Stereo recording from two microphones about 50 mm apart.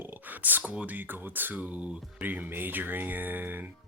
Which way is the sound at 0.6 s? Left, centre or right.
Right.